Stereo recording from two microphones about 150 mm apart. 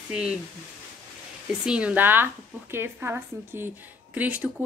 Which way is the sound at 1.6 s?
5° right (ahead or behind).